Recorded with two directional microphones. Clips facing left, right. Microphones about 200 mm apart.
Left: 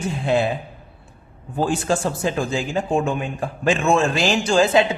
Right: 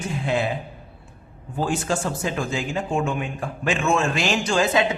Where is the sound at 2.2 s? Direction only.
35° left (ahead or behind).